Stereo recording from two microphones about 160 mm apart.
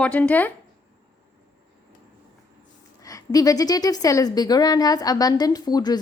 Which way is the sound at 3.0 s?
20° left (ahead or behind).